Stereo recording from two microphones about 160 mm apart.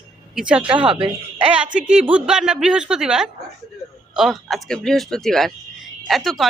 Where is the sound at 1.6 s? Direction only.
5° right (ahead or behind).